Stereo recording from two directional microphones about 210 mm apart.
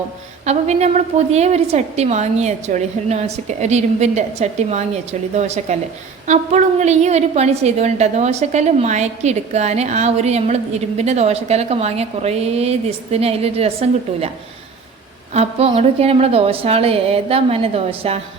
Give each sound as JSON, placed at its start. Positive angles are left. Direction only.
{"t": 0.4, "sound": "a woman's voice", "side_deg": -30}
{"t": 15.3, "sound": "a woman's voice", "side_deg": -30}